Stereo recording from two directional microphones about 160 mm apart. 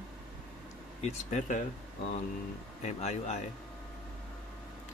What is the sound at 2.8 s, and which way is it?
Speech, 45° left (ahead or behind).